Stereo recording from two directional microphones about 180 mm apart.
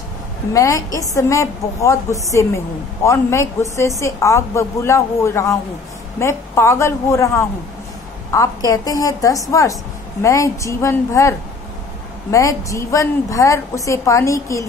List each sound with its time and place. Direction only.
0.5 s a woman's voice: 20° left (ahead or behind)